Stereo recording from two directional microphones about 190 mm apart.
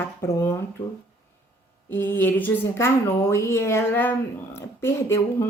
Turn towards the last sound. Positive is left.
turn(degrees=15)  # may be behind; listen again after turning